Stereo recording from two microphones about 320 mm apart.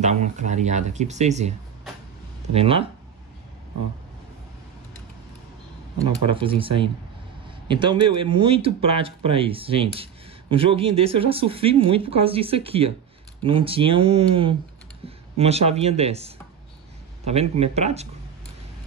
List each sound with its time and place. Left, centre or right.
0.0 s speech: right
2.5 s speech: centre
6.4 s speech: centre